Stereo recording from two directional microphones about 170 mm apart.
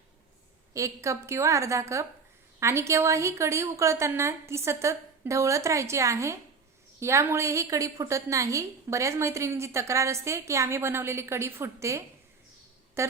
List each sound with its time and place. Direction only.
0.7 s a woman's voice: 20° right (ahead or behind)